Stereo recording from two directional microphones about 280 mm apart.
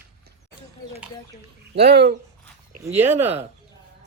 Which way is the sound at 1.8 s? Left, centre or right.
Right.